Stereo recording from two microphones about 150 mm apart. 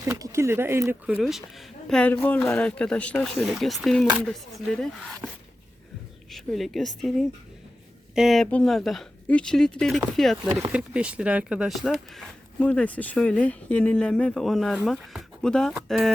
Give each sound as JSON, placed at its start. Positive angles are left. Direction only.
{"t": 0.2, "sound": "speech", "side_deg": -20}
{"t": 1.2, "sound": "speech", "side_deg": 0}
{"t": 6.3, "sound": "speech", "side_deg": 0}